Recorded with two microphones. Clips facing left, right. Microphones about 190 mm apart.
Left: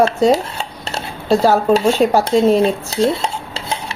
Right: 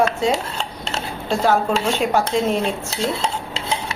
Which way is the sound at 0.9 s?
35° left (ahead or behind).